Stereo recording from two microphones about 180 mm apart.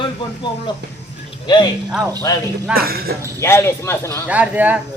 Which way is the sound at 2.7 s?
60° right (ahead or behind).